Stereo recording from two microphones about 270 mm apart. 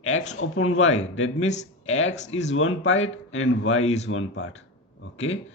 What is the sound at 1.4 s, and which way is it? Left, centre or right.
Speech, left.